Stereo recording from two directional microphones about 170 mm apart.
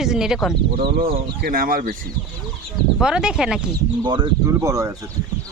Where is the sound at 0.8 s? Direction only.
30° right (ahead or behind).